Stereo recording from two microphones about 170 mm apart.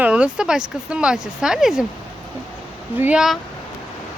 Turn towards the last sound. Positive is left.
turn(degrees=-5)  # may be behind; listen again after turning